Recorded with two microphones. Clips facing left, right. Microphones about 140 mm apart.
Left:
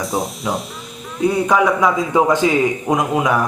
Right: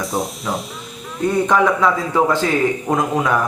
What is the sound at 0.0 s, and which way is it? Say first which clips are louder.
Speech: left 1 dB; centre (ahead or behind).